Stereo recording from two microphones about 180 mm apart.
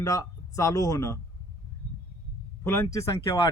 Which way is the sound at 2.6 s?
15° left (ahead or behind).